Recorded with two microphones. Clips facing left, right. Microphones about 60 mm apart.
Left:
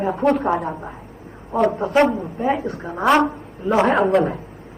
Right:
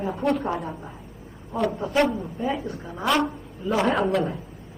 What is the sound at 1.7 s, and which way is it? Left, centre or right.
A woman's voice, left.